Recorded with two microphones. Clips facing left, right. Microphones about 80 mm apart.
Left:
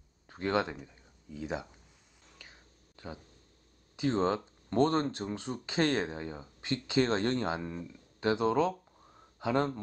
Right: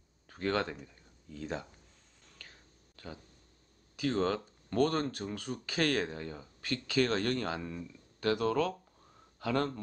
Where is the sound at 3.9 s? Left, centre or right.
Left.